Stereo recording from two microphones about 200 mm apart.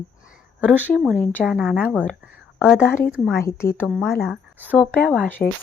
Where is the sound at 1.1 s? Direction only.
10° left (ahead or behind).